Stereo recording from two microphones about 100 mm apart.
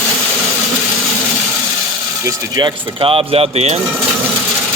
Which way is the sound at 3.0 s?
70° right (ahead or behind).